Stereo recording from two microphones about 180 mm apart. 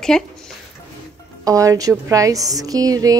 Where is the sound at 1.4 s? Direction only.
20° right (ahead or behind).